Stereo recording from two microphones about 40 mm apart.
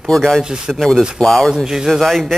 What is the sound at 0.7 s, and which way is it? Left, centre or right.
Speech, centre.